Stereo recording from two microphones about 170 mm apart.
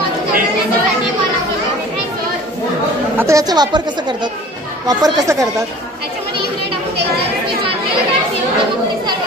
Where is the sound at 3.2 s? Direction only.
20° right (ahead or behind).